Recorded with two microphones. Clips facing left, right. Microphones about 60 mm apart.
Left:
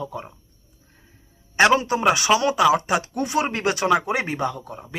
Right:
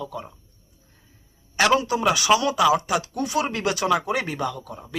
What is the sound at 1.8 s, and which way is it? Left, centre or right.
Speech, left.